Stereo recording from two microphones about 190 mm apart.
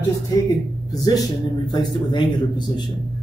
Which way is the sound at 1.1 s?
20° left (ahead or behind).